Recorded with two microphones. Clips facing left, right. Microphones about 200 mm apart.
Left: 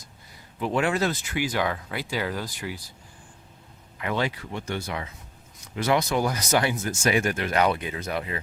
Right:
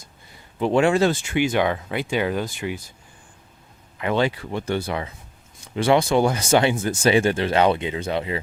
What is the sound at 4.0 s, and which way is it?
Speech, 25° right (ahead or behind).